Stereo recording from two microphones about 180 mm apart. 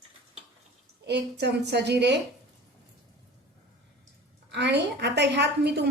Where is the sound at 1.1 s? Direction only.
65° right (ahead or behind).